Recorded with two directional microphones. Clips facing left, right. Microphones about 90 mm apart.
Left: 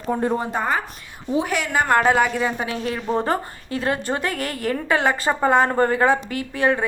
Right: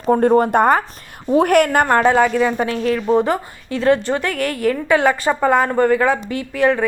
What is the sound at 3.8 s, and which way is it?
A woman's voice, 25° left (ahead or behind).